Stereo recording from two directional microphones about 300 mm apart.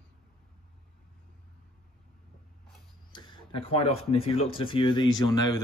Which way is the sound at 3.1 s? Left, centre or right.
Centre.